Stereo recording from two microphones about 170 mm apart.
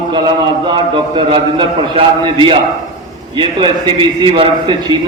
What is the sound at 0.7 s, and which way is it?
A man's voice, 30° right (ahead or behind).